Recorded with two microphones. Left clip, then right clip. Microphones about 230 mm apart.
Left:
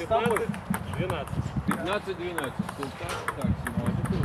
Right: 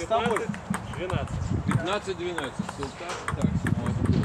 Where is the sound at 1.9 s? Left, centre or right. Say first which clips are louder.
Right 1 dB; right.